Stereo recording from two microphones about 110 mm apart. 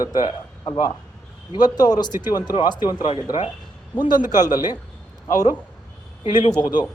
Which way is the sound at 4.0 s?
40° left (ahead or behind).